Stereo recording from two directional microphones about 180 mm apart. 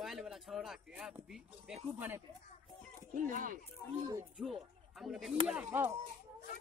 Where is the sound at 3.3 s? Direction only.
50° right (ahead or behind).